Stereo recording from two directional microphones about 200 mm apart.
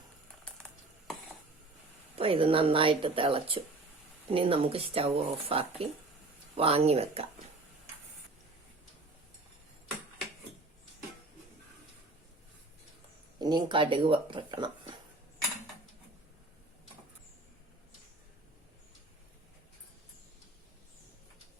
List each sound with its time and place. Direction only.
2.1 s speech: 30° right (ahead or behind)
13.4 s speech: 20° right (ahead or behind)